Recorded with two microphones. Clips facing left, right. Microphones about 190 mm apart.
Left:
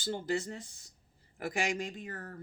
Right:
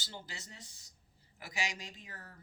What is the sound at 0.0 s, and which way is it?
Speech, 50° left (ahead or behind).